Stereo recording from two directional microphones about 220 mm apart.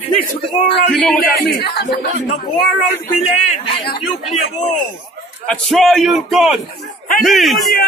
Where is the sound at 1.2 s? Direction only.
45° left (ahead or behind).